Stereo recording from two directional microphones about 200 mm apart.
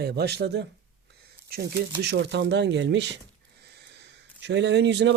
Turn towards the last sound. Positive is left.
turn(degrees=-60)  # may be behind; listen again after turning